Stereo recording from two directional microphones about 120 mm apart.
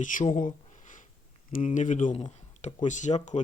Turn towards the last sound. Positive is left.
turn(degrees=75)  # may be behind; listen again after turning